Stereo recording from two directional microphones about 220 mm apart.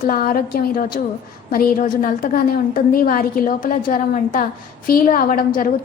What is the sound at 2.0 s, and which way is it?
A woman's voice, 40° left (ahead or behind).